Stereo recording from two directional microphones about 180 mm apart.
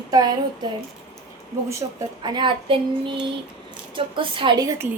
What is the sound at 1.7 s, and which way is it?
A woman's voice, 20° right (ahead or behind).